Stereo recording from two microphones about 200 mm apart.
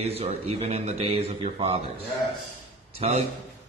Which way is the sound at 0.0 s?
30° right (ahead or behind).